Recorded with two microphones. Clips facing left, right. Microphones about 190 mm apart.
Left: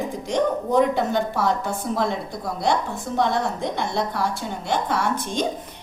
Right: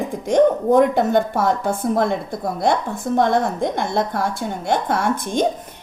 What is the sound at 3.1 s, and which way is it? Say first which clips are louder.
A woman's voice: right 5 dB; 50° right (ahead or behind).